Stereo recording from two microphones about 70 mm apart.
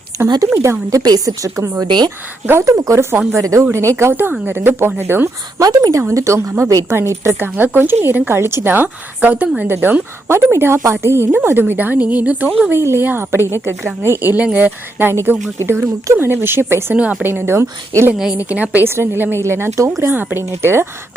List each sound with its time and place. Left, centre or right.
0.1 s speech: right
1.8 s speech: right
2.5 s a woman's voice: right
4.1 s a woman's voice: right
5.5 s a woman's voice: right
6.0 s a woman's voice: right
12.7 s a woman's voice: right
18.1 s speech: centre
18.3 s speech: right
18.9 s a woman's voice: right